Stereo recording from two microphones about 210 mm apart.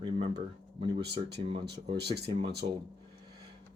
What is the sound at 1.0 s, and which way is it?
Speech, 50° right (ahead or behind).